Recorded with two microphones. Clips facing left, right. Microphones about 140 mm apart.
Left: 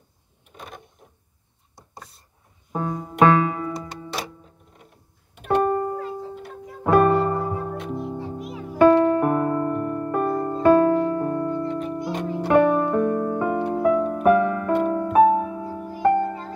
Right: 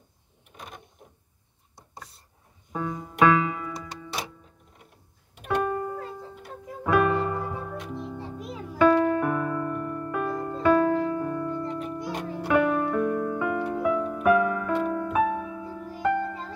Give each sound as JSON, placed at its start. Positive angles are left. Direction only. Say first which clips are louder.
{"t": 2.7, "sound": "music", "louder": "left 4 dB", "side_deg": 40}
{"t": 5.6, "sound": "music", "louder": "left 6 dB", "side_deg": 45}
{"t": 12.5, "sound": "piano", "louder": "left 5 dB", "side_deg": 40}
{"t": 13.7, "sound": "music", "louder": "left 6 dB", "side_deg": 35}